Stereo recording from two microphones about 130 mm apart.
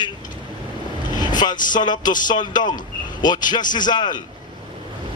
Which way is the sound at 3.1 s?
35° left (ahead or behind).